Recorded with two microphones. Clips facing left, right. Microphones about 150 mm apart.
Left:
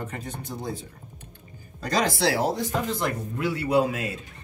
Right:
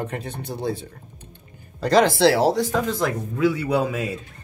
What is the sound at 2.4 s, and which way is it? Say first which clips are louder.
Speech: right 6 dB; 90° right.